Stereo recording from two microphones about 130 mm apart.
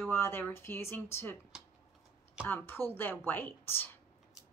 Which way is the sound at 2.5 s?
15° left (ahead or behind).